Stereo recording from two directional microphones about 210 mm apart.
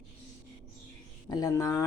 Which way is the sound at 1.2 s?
20° left (ahead or behind).